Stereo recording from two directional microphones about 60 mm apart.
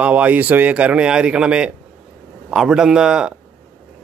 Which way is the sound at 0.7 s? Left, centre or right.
Right.